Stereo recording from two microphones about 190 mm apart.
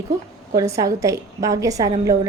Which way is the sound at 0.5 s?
15° right (ahead or behind).